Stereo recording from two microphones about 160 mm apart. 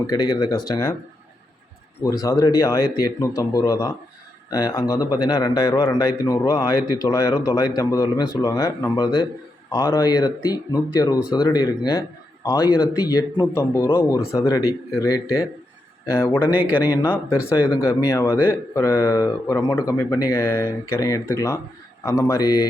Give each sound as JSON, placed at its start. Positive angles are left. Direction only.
{"t": 0.1, "sound": "speech", "side_deg": 25}
{"t": 2.0, "sound": "speech", "side_deg": 20}
{"t": 16.5, "sound": "speech", "side_deg": -10}
{"t": 16.8, "sound": "speech", "side_deg": 20}